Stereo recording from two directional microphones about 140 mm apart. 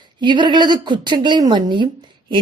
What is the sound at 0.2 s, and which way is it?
A woman's voice, 35° right (ahead or behind).